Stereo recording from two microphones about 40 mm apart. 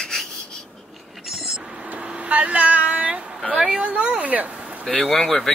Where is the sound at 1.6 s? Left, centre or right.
Right.